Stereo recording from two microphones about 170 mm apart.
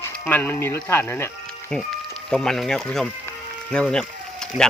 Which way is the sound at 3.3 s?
5° left (ahead or behind).